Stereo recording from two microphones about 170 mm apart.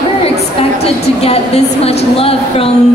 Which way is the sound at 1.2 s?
35° left (ahead or behind).